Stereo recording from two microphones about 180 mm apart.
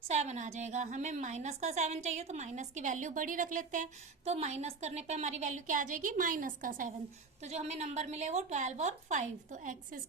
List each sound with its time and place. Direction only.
0.1 s a woman's voice: 40° right (ahead or behind)